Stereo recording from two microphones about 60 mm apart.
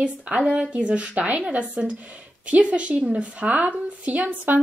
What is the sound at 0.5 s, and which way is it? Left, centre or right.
A woman's voice, centre.